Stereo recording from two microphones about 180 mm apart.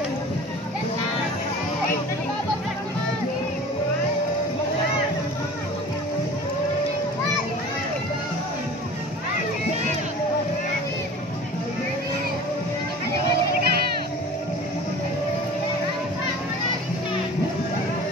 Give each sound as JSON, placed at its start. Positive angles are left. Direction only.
{"t": 13.6, "sound": "music", "side_deg": -60}